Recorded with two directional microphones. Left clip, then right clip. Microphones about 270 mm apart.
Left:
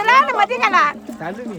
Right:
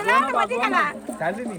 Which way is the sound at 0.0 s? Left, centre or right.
Left.